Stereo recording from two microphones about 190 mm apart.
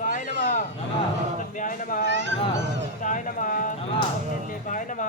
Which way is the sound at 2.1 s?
70° right (ahead or behind).